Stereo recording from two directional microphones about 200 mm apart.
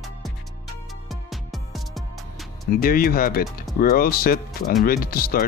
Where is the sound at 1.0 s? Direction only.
Centre (ahead or behind).